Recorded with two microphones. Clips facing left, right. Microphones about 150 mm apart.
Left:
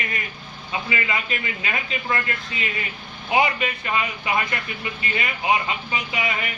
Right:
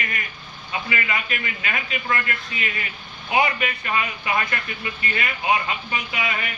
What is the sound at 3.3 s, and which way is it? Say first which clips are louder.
A man's voice: left 1 dB; 20° left (ahead or behind).